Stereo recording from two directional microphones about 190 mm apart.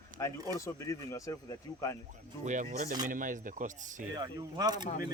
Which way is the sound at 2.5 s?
40° right (ahead or behind).